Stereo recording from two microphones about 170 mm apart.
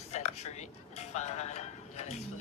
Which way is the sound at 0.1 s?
40° left (ahead or behind).